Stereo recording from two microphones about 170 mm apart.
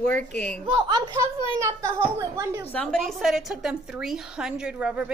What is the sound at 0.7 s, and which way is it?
Speech, 25° right (ahead or behind).